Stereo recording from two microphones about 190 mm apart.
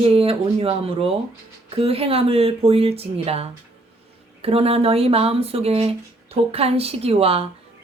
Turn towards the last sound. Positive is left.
turn(degrees=-30)  # may be behind; listen again after turning